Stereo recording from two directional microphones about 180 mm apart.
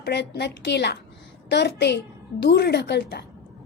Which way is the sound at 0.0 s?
65° left (ahead or behind).